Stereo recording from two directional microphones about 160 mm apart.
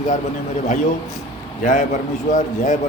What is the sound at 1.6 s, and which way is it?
A man's voice, 55° left (ahead or behind).